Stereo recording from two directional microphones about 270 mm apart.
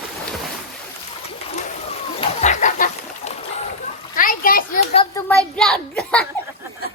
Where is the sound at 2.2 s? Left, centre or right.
Left.